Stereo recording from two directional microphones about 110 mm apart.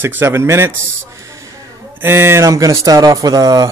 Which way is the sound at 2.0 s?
20° right (ahead or behind).